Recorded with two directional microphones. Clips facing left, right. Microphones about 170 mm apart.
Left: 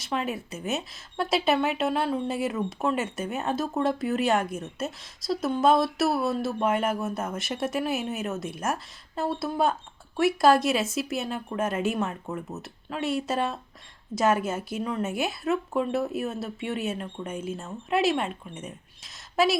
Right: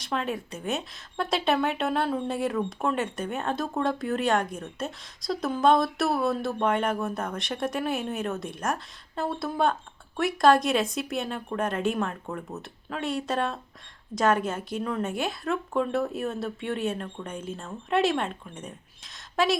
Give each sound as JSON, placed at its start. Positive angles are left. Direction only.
{"t": 0.0, "sound": "a woman's voice", "side_deg": 5}